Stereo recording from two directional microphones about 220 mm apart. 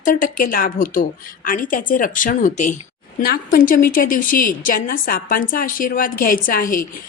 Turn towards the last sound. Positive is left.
turn(degrees=40)  # may be behind; listen again after turning